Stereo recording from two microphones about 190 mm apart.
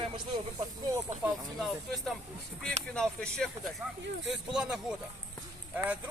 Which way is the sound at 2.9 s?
5° left (ahead or behind).